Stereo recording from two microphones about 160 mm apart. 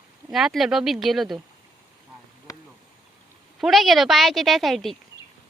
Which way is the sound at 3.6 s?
Centre (ahead or behind).